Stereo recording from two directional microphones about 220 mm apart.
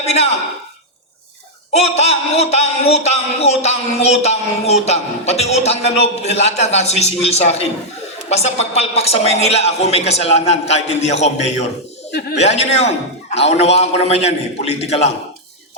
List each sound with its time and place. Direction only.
0.0 s speech: 30° left (ahead or behind)
1.7 s a man's voice: 30° left (ahead or behind)
12.4 s a man's voice: 30° left (ahead or behind)